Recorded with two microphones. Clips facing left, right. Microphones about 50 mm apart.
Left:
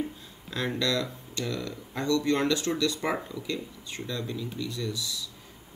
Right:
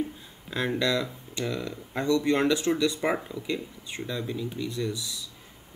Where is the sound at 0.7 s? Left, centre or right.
Centre.